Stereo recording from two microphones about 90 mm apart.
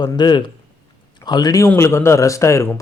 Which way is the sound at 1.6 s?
30° left (ahead or behind).